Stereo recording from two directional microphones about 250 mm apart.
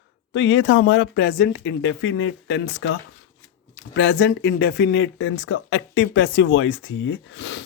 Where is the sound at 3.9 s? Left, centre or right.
Left.